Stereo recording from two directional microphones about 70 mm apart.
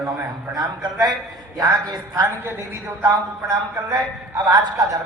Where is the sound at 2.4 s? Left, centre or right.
Right.